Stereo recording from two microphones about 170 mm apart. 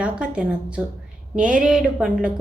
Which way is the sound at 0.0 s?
5° right (ahead or behind).